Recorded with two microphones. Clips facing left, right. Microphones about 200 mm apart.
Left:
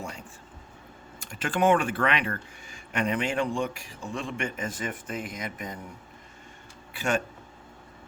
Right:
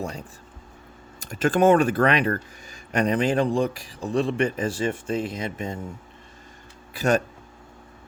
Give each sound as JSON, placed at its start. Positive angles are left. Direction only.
{"t": 0.0, "sound": "speech", "side_deg": -35}
{"t": 6.9, "sound": "speech", "side_deg": -40}